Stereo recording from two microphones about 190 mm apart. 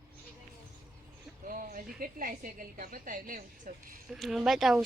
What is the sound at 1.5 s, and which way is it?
A woman's voice, 45° right (ahead or behind).